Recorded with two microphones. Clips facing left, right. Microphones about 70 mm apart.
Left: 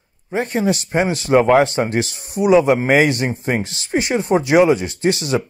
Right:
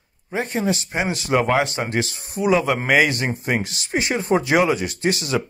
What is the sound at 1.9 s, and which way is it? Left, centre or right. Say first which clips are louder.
Speech: left 3 dB; right.